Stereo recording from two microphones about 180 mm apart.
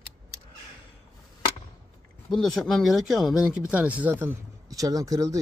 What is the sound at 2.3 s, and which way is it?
Speech, centre (ahead or behind).